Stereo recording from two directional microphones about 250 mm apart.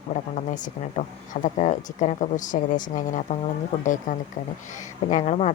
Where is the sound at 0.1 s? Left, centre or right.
Left.